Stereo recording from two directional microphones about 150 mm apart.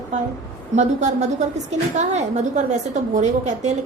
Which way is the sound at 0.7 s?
50° right (ahead or behind).